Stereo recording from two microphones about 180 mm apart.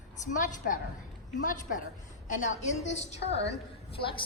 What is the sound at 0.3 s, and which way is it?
Speech, 45° left (ahead or behind).